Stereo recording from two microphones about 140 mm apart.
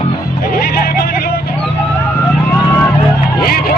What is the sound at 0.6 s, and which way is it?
Vehicle, 90° left.